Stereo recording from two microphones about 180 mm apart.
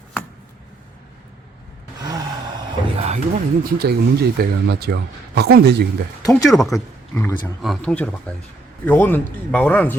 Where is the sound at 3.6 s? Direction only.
60° right (ahead or behind).